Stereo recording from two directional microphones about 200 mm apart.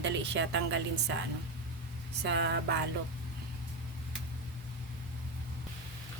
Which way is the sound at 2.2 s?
60° right (ahead or behind).